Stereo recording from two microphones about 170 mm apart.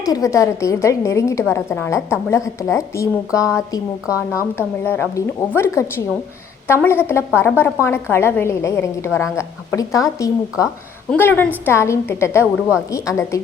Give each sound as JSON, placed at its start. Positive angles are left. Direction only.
{"t": 0.0, "sound": "a woman's voice", "side_deg": 20}